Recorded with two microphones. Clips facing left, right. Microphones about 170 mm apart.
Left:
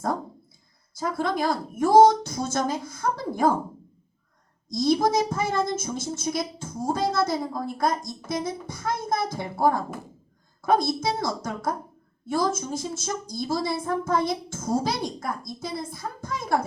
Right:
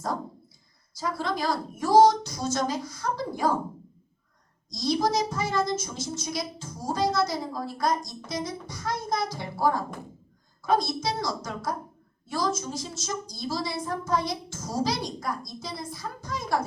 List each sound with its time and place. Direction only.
0.9 s a woman's voice: 50° left (ahead or behind)
4.7 s a woman's voice: 55° left (ahead or behind)